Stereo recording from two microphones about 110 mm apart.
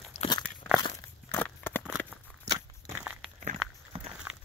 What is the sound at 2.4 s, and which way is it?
Crunch, 30° right (ahead or behind).